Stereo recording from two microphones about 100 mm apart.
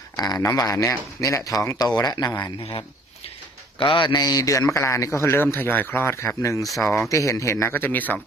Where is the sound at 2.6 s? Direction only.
60° left (ahead or behind).